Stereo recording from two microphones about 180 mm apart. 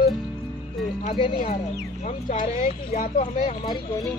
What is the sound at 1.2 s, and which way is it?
Speech, 35° left (ahead or behind).